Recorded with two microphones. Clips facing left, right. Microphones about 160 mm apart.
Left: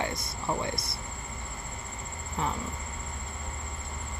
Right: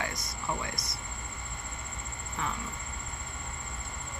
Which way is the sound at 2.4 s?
30° left (ahead or behind).